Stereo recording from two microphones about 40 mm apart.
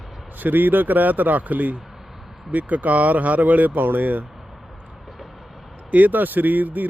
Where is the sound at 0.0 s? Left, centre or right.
Centre.